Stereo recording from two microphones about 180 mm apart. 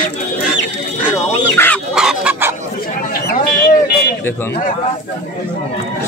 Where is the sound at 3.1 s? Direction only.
55° left (ahead or behind).